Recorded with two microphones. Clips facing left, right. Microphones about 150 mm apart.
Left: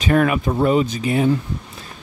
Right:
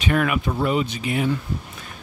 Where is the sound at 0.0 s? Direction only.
40° left (ahead or behind).